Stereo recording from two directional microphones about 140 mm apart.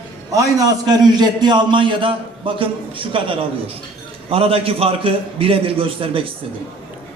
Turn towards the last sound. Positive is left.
turn(degrees=-40)  # may be behind; listen again after turning